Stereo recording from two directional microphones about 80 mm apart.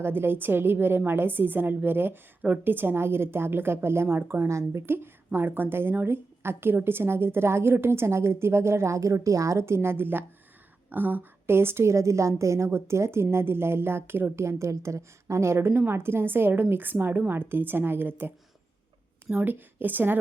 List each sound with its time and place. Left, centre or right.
0.0 s a woman's voice: right
14.4 s a woman's voice: right